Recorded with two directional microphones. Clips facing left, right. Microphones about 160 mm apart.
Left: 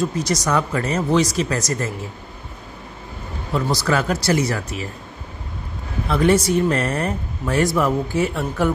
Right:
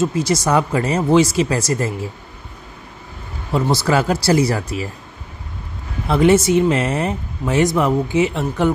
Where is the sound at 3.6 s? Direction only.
30° right (ahead or behind).